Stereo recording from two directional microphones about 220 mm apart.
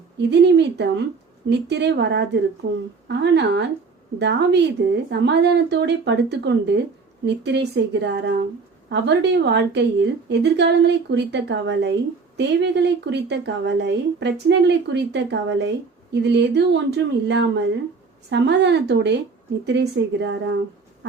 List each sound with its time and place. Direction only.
0.2 s a woman's voice: 50° right (ahead or behind)